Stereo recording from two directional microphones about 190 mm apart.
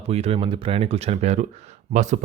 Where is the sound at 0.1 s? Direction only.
35° right (ahead or behind).